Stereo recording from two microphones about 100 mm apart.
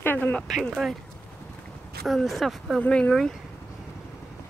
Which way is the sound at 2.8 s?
10° left (ahead or behind).